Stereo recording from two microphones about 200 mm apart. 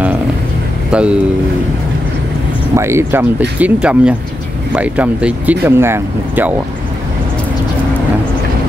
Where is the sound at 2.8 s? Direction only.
15° right (ahead or behind).